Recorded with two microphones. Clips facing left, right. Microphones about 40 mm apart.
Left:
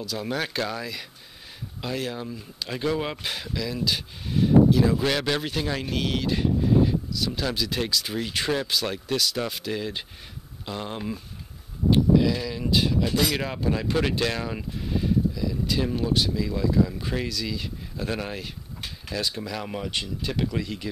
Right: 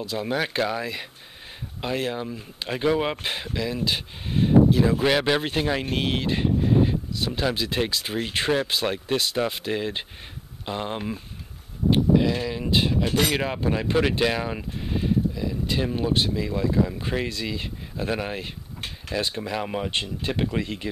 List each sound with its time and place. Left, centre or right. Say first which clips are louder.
0.0 s speech: right 3 dB; right
5.0 s speech: right 4 dB; centre
13.4 s speech: right 2 dB; right
17.9 s speech: right 3 dB; centre
19.9 s speech: right 2 dB; right